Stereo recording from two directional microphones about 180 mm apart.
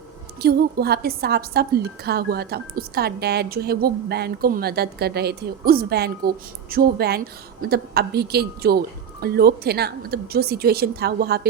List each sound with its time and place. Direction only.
0.3 s speech: 60° right (ahead or behind)